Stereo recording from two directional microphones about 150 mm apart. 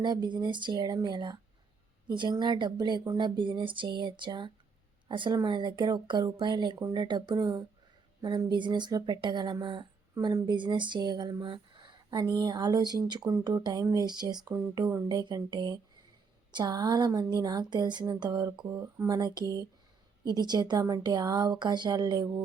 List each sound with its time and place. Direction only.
0.0 s a woman's voice: 30° right (ahead or behind)